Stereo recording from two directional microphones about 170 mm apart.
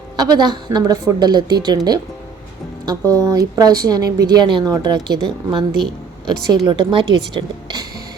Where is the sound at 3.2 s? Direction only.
20° right (ahead or behind).